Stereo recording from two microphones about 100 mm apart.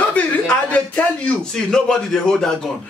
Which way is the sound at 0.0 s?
15° left (ahead or behind).